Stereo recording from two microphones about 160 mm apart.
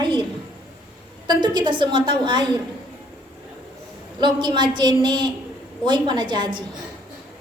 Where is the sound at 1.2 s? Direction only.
25° right (ahead or behind).